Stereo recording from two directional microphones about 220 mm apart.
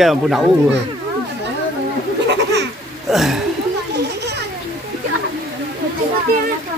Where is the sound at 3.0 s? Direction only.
Centre (ahead or behind).